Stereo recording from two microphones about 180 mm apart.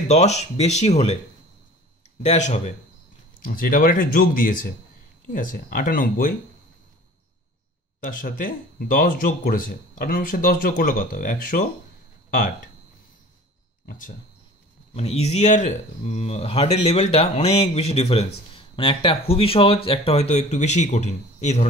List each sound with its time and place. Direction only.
0.1 s speech: 40° left (ahead or behind)
2.2 s speech: 40° left (ahead or behind)
3.4 s speech: 50° left (ahead or behind)
8.0 s speech: 50° left (ahead or behind)
13.8 s speech: 50° left (ahead or behind)
15.0 s speech: 35° left (ahead or behind)